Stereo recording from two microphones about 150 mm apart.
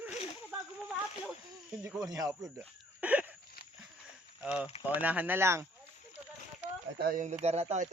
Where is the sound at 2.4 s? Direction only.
10° right (ahead or behind).